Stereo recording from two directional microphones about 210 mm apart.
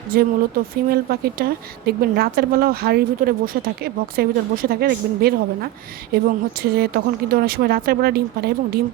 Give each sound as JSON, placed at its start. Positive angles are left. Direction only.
{"t": 0.1, "sound": "a woman's voice", "side_deg": -45}